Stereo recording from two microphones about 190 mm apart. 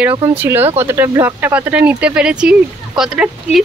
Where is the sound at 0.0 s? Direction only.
10° right (ahead or behind).